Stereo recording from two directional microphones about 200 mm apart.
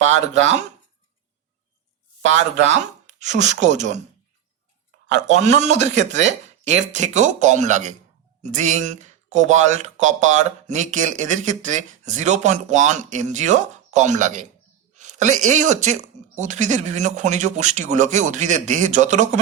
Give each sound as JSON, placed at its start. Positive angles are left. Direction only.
{"t": 2.6, "sound": "speech", "side_deg": -35}
{"t": 5.1, "sound": "speech", "side_deg": -35}